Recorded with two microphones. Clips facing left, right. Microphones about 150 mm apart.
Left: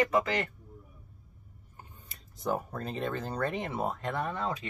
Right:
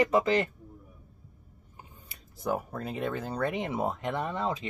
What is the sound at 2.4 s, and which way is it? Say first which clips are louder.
Speech: right 1 dB; 10° right (ahead or behind).